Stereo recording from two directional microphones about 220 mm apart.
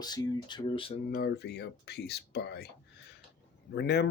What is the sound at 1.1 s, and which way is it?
Speech, 45° left (ahead or behind).